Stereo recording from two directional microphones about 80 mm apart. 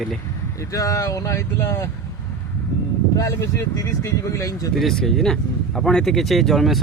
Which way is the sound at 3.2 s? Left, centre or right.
Left.